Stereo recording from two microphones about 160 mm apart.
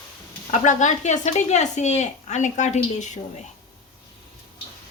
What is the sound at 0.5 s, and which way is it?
Speech, 50° left (ahead or behind).